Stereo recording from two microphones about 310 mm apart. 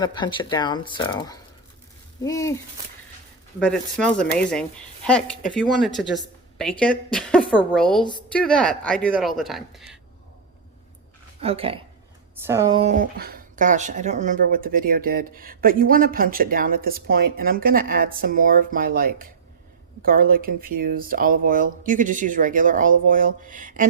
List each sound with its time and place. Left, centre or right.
0.0 s speech: centre
3.6 s speech: centre
11.3 s a woman's voice: centre